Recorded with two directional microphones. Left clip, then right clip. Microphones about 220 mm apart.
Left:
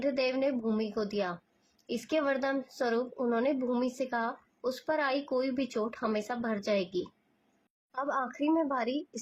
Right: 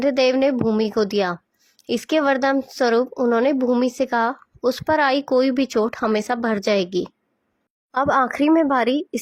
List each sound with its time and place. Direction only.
0.0 s speech: 45° right (ahead or behind)